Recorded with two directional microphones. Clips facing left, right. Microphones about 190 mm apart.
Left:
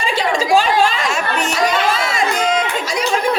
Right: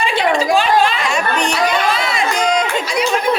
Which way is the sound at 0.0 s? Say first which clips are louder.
Right 2 dB; 40° left (ahead or behind).